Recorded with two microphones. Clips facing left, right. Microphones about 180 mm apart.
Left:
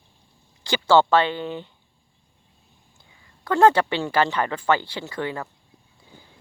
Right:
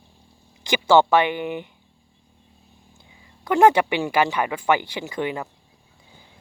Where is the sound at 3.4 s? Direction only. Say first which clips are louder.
Right 1 dB; 15° right (ahead or behind).